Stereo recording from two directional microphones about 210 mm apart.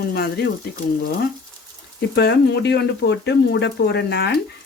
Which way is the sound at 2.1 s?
55° left (ahead or behind).